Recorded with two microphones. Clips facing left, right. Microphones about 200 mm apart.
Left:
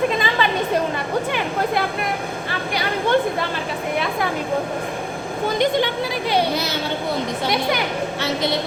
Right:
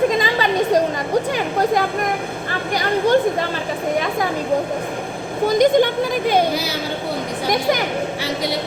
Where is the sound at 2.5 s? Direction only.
45° right (ahead or behind).